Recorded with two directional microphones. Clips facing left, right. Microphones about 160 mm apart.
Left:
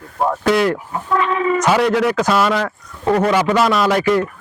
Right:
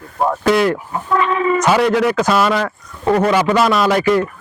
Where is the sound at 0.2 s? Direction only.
25° right (ahead or behind).